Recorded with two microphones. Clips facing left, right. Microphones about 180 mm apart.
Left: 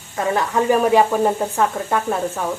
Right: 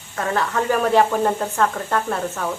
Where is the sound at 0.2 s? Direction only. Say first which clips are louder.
Left 3 dB; 10° left (ahead or behind).